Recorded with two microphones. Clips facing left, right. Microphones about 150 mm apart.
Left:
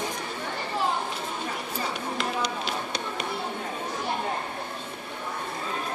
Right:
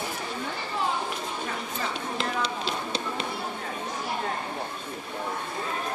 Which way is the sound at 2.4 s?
30° right (ahead or behind).